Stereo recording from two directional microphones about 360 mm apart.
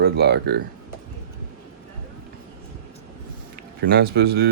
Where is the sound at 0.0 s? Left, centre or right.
Right.